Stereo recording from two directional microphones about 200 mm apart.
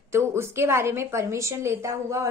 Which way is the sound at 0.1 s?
15° right (ahead or behind).